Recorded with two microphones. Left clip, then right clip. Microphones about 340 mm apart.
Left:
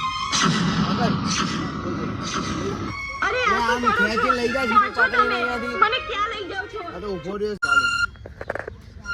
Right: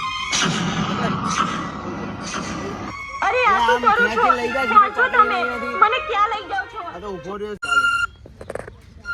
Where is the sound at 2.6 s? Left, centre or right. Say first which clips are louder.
Left 1 dB; centre.